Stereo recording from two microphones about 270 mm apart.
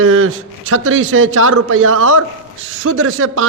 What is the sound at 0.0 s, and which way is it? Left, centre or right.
A man's voice, right.